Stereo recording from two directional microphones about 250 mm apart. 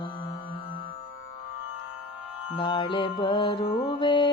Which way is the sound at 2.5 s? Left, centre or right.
Centre.